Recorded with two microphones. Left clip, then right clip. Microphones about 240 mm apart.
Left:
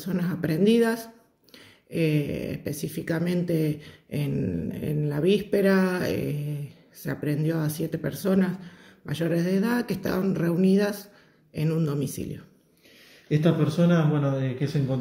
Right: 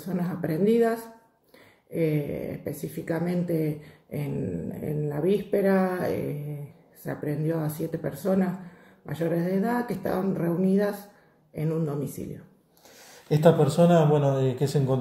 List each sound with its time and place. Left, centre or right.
0.0 s speech: left
2.0 s speech: left
13.3 s speech: centre